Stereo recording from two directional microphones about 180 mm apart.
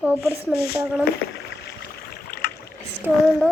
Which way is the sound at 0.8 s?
5° right (ahead or behind).